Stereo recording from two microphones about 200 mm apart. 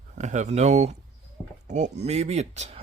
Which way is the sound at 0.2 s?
35° right (ahead or behind).